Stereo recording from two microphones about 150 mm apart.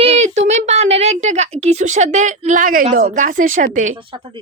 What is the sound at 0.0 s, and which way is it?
A woman's voice, 45° right (ahead or behind).